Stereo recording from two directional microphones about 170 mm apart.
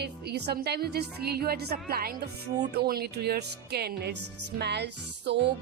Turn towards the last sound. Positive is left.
turn(degrees=-90)